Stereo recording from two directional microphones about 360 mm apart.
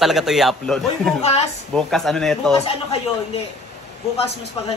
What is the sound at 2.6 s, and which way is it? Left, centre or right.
Speech, centre.